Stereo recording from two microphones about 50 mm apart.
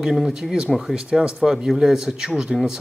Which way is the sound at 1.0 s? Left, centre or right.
Centre.